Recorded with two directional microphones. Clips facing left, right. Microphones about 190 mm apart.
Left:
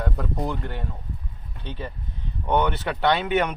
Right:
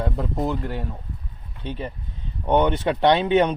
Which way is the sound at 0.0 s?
15° right (ahead or behind).